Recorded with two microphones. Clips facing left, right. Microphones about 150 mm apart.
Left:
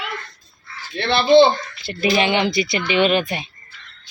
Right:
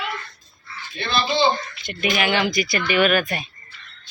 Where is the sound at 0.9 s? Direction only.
70° left (ahead or behind).